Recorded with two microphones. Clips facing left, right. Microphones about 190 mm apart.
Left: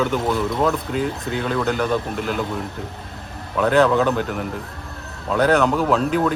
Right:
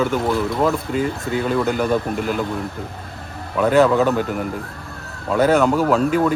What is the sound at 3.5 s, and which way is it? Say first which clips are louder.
Speech: right 2 dB; 5° right (ahead or behind).